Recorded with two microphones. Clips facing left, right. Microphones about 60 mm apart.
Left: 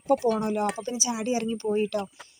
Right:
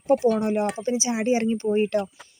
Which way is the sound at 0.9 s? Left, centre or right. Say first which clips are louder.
Right 5 dB; right.